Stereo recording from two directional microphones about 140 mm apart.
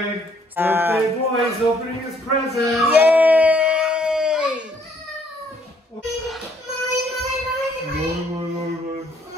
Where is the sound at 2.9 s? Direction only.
10° right (ahead or behind).